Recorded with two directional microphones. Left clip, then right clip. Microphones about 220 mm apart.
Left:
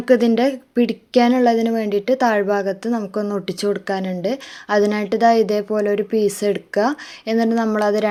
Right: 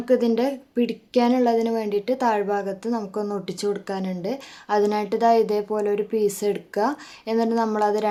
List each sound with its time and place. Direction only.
0.0 s a woman's voice: 20° left (ahead or behind)